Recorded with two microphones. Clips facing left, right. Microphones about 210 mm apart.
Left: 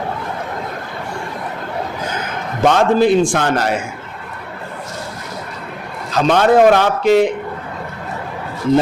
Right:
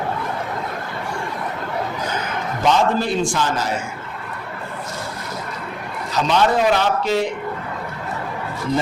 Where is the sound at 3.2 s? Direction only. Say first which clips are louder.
Left 5 dB; 60° left (ahead or behind).